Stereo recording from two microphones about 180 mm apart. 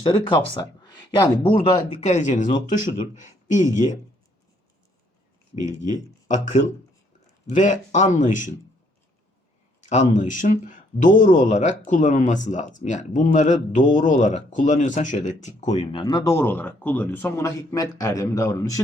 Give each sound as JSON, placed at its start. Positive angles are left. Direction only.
{"t": 0.0, "sound": "speech", "side_deg": 30}
{"t": 1.9, "sound": "speech", "side_deg": 40}
{"t": 5.6, "sound": "speech", "side_deg": 45}
{"t": 9.9, "sound": "speech", "side_deg": 40}
{"t": 15.8, "sound": "speech", "side_deg": 25}